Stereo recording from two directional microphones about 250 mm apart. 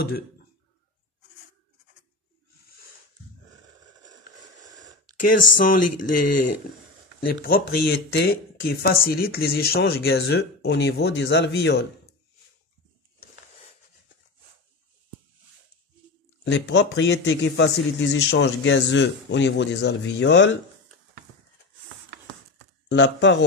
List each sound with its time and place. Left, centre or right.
4.0 s a sound: centre
5.6 s speech: left
6.3 s speech: left
7.4 s speech: left
16.4 s a man's voice: left
22.8 s a man's voice: left